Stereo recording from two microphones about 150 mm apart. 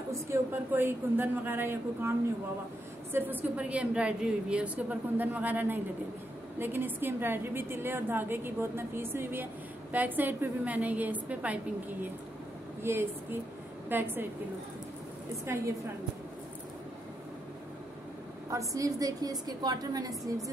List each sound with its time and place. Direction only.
0.1 s a woman's voice: 15° right (ahead or behind)
15.4 s a woman's voice: 20° right (ahead or behind)
18.5 s a woman's voice: 20° right (ahead or behind)